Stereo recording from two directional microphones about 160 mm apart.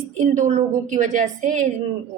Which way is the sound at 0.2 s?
50° right (ahead or behind).